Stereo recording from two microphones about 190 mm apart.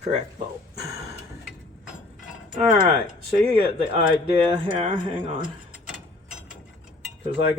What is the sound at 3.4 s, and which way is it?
Speech, 30° right (ahead or behind).